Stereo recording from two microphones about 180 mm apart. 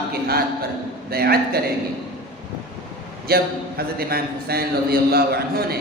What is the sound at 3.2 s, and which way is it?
A man's voice, 60° right (ahead or behind).